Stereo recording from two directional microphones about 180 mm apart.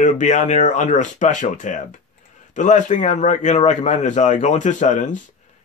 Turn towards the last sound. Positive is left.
turn(degrees=40)  # may be behind; listen again after turning